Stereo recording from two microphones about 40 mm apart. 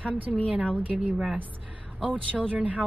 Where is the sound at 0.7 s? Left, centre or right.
Right.